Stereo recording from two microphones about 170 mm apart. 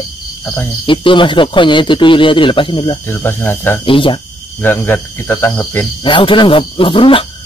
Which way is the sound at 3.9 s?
30° left (ahead or behind).